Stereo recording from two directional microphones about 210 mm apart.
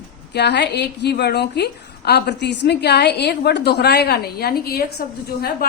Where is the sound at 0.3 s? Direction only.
55° left (ahead or behind).